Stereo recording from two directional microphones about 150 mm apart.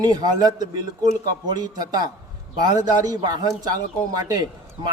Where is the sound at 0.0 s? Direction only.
25° right (ahead or behind).